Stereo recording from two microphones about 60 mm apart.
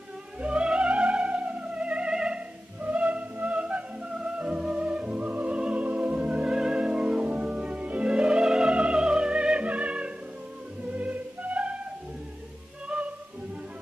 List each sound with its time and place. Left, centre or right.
0.4 s music: centre
12.8 s music: centre